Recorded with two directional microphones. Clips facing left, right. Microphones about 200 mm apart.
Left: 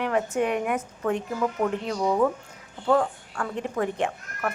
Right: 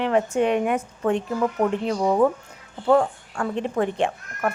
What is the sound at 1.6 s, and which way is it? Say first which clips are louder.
Speech: right 4 dB; 40° right (ahead or behind).